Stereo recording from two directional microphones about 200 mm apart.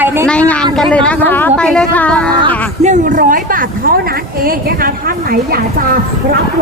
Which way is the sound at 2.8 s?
40° right (ahead or behind).